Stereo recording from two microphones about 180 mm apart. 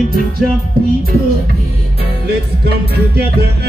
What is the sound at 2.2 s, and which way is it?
Music, 65° right (ahead or behind).